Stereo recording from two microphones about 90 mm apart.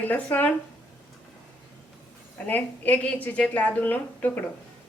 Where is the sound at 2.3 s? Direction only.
20° left (ahead or behind).